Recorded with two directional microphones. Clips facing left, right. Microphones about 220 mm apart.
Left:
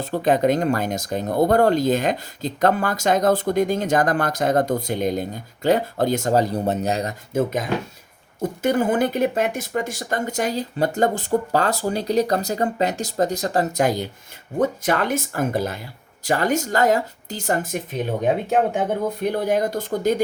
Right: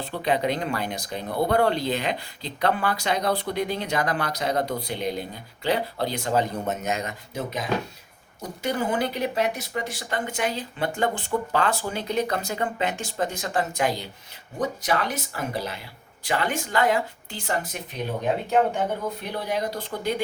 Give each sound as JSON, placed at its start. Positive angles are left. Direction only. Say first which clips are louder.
{"t": 0.0, "sound": "speech", "louder": "left 6 dB", "side_deg": 45}
{"t": 7.3, "sound": "speech", "louder": "left 6 dB", "side_deg": 50}